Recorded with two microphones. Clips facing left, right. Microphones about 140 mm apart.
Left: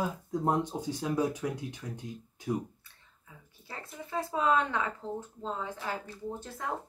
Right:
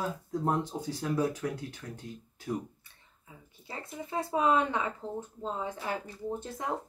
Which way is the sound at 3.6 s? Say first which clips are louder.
Right 3 dB; 20° right (ahead or behind).